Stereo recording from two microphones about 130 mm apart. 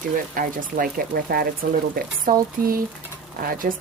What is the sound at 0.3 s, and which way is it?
Speech, 90° right.